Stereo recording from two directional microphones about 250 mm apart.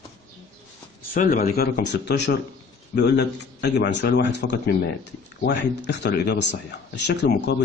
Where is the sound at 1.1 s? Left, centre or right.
Left.